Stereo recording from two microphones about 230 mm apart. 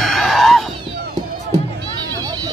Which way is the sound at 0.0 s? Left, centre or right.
Centre.